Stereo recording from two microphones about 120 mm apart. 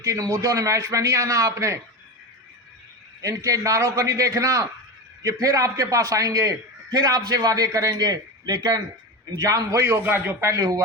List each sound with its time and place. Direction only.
0.0 s a man's voice: 25° right (ahead or behind)
3.2 s a man's voice: 25° right (ahead or behind)